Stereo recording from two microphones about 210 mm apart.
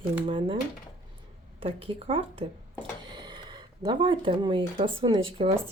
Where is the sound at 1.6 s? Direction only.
25° right (ahead or behind).